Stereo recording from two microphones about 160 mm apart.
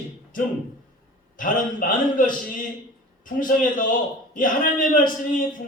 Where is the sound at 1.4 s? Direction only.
60° left (ahead or behind).